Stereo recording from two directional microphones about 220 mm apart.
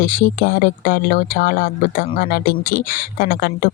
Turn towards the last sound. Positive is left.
turn(degrees=45)  # may be behind; listen again after turning